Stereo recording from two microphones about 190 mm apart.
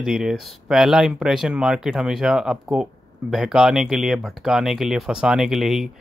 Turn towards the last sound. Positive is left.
turn(degrees=0)  # may be behind; listen again after turning